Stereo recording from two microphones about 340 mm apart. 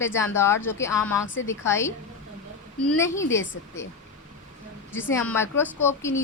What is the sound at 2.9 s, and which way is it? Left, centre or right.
Speech, centre.